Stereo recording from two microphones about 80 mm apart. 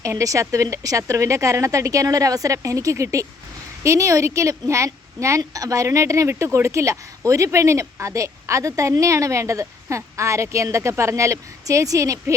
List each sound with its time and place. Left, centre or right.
0.0 s a woman's voice: right